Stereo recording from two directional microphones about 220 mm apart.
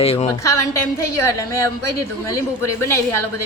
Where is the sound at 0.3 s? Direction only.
15° left (ahead or behind).